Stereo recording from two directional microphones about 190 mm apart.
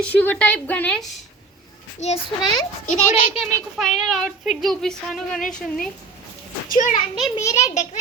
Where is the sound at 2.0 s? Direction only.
35° left (ahead or behind).